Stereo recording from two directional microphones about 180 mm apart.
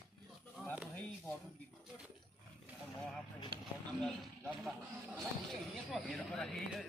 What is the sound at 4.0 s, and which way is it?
Speech, centre (ahead or behind).